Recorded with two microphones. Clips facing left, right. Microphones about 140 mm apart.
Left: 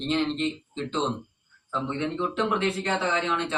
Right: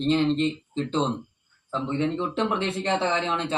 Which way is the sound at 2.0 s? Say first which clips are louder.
Right 3 dB; 30° right (ahead or behind).